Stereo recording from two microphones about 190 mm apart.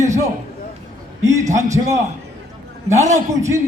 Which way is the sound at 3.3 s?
15° right (ahead or behind).